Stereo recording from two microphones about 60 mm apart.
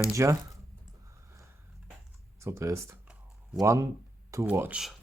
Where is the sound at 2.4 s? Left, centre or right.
Right.